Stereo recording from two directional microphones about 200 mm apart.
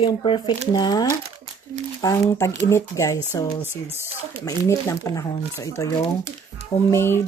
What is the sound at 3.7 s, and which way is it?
Speech, 10° right (ahead or behind).